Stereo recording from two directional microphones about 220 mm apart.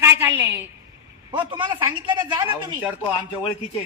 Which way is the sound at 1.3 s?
20° right (ahead or behind).